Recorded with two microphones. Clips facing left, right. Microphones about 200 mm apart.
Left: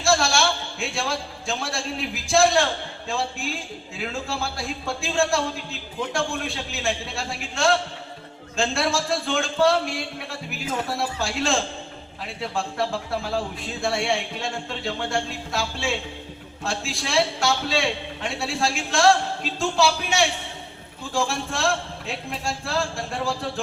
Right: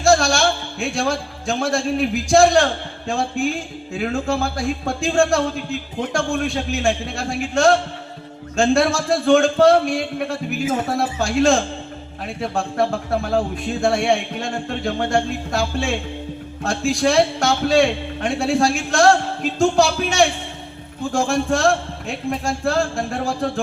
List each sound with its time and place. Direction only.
0.0 s a sound: 55° right (ahead or behind)
0.9 s a man's voice: 55° right (ahead or behind)
10.9 s a man's voice: 55° right (ahead or behind)